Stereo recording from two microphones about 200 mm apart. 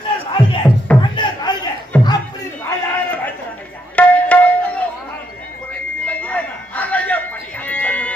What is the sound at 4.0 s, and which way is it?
Tabla, 5° left (ahead or behind).